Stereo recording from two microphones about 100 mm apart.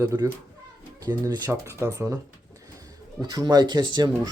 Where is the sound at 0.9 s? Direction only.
40° right (ahead or behind).